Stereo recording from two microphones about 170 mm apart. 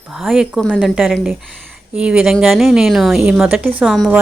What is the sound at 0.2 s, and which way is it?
Speech, centre (ahead or behind).